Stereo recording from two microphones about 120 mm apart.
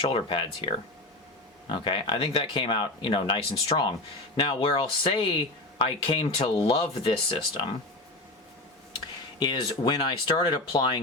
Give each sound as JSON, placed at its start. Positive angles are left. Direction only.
{"t": 0.0, "sound": "speech", "side_deg": 45}
{"t": 1.7, "sound": "speech", "side_deg": 45}
{"t": 9.4, "sound": "speech", "side_deg": 40}